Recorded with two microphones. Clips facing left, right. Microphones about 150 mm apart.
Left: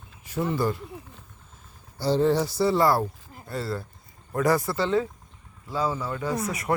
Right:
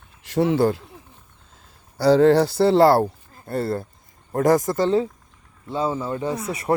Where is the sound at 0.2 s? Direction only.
85° right.